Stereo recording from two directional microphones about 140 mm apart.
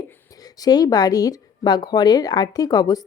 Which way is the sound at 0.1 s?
25° left (ahead or behind).